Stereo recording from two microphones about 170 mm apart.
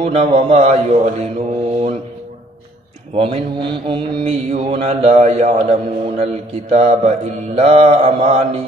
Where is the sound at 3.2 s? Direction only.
35° right (ahead or behind).